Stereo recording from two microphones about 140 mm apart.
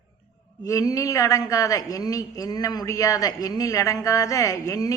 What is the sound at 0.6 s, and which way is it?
A woman's voice, 25° left (ahead or behind).